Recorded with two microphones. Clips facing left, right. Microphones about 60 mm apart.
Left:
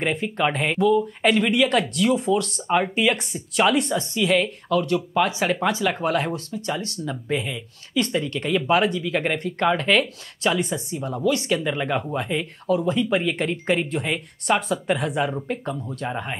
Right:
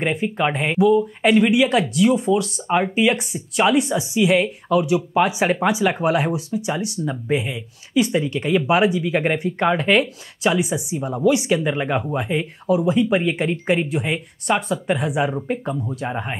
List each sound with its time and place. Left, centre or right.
0.0 s speech: centre